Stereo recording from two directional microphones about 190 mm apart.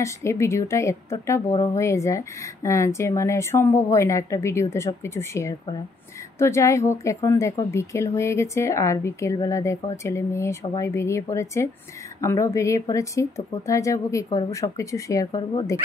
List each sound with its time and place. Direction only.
0.0 s a woman's voice: 15° left (ahead or behind)